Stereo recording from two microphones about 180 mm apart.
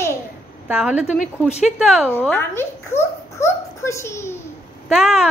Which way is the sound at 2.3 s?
15° left (ahead or behind).